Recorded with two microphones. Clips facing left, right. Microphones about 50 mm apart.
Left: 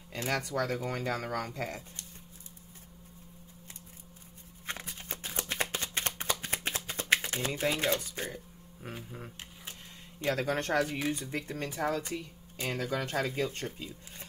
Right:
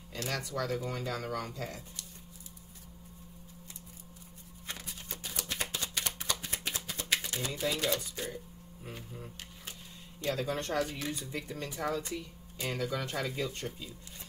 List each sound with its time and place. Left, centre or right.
0.3 s speech: left
4.6 s shuffling cards: left
6.4 s a sound: left
10.2 s speech: left
10.8 s speech: left